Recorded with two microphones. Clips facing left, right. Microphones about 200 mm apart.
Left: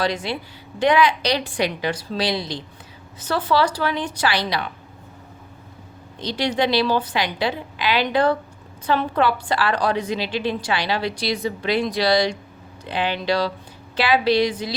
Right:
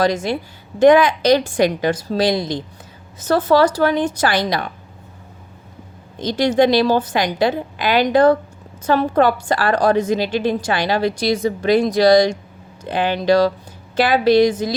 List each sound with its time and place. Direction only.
0.0 s a woman's voice: 45° right (ahead or behind)
6.1 s a woman's voice: 45° right (ahead or behind)